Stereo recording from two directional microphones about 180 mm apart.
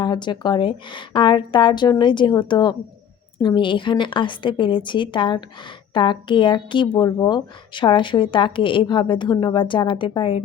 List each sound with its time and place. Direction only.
0.0 s speech: 25° left (ahead or behind)